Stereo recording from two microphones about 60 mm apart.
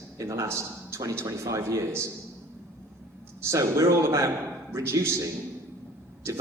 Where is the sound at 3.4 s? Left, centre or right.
Right.